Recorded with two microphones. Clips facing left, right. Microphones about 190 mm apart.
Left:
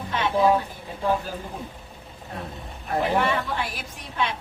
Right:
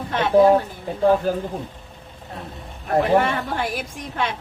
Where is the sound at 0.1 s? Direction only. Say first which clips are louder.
Right 6 dB; 55° right (ahead or behind).